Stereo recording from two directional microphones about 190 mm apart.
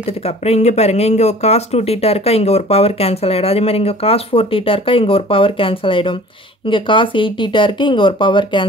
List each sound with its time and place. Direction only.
0.0 s speech: 35° left (ahead or behind)